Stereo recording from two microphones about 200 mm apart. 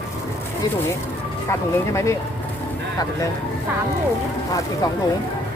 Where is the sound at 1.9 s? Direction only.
15° left (ahead or behind).